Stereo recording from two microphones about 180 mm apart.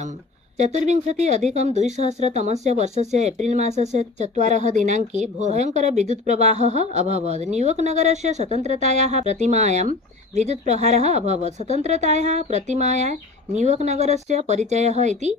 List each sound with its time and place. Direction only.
0.6 s a woman's voice: 40° right (ahead or behind)